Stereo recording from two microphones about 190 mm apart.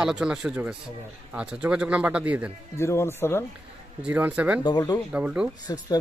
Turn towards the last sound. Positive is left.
turn(degrees=20)  # may be behind; listen again after turning